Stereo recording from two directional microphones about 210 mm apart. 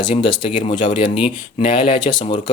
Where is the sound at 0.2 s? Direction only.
25° left (ahead or behind).